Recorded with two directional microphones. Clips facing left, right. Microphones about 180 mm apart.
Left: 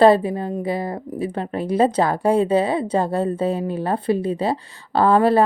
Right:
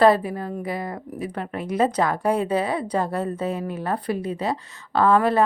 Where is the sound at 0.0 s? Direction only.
25° left (ahead or behind).